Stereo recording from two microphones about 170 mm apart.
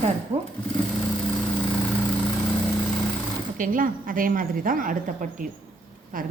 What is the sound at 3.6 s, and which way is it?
A woman's voice, 50° right (ahead or behind).